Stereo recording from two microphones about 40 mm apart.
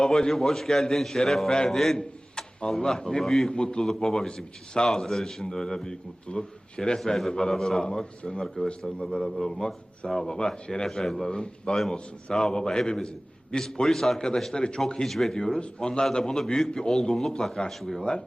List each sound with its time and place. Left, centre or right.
0.0 s a man's voice: centre
2.0 s a man's voice: left
3.2 s a man's voice: centre
3.5 s a man's voice: left
10.8 s a man's voice: centre
11.3 s a man's voice: left
14.2 s a man's voice: centre
15.0 s a man's voice: centre
15.4 s a man's voice: centre